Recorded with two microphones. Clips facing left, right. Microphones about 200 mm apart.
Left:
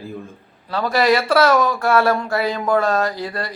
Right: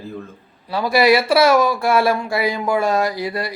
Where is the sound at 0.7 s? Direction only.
10° right (ahead or behind).